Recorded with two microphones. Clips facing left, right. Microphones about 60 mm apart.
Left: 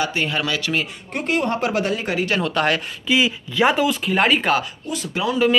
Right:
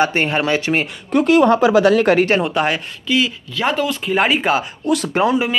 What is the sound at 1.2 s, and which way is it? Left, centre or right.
Speech, right.